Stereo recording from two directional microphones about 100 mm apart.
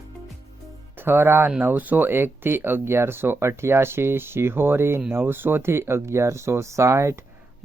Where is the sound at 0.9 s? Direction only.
20° right (ahead or behind).